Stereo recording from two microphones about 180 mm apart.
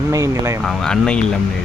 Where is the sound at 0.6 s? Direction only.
5° left (ahead or behind).